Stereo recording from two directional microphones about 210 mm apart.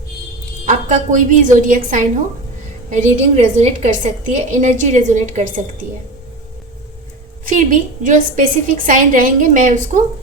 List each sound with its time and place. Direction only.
0.6 s a woman's voice: 35° right (ahead or behind)
7.4 s a woman's voice: 40° right (ahead or behind)